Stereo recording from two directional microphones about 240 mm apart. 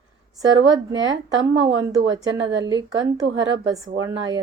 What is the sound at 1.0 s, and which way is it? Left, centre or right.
Speech, right.